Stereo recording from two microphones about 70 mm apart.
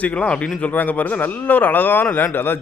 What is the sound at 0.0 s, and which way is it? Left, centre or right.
Speech, centre.